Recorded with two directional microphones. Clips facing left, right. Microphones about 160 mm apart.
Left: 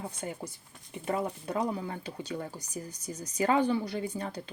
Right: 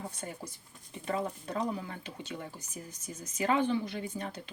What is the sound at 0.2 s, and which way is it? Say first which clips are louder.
Speech: left 5 dB; 25° left (ahead or behind).